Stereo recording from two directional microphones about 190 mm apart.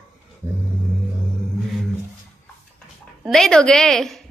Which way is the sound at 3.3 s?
5° left (ahead or behind).